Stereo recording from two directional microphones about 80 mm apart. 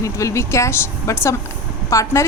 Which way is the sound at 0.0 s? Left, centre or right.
Left.